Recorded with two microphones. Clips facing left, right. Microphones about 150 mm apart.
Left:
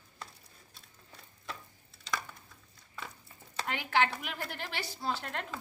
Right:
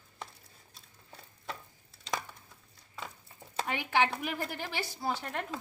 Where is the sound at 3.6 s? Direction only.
15° right (ahead or behind).